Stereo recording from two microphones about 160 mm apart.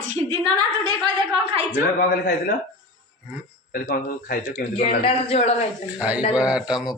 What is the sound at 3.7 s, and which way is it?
Speech, 60° left (ahead or behind).